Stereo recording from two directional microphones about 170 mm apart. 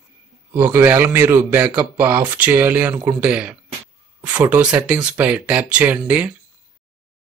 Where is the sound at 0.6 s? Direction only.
10° right (ahead or behind).